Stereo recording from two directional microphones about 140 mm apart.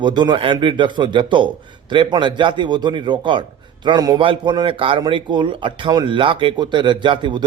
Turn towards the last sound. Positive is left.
turn(degrees=-35)  # may be behind; listen again after turning